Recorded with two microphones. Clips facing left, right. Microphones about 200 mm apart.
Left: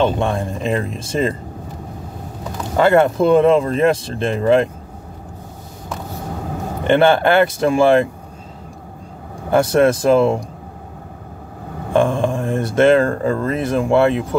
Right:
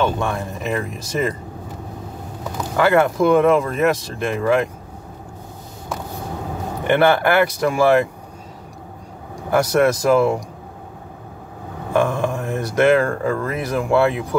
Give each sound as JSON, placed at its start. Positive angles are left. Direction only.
{"t": 0.0, "sound": "speech", "side_deg": 30}
{"t": 2.7, "sound": "speech", "side_deg": 25}
{"t": 6.9, "sound": "speech", "side_deg": 25}
{"t": 9.5, "sound": "speech", "side_deg": 25}
{"t": 11.9, "sound": "speech", "side_deg": 25}